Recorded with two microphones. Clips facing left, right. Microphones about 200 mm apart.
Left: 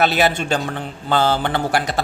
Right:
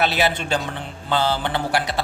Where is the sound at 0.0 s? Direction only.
45° left (ahead or behind).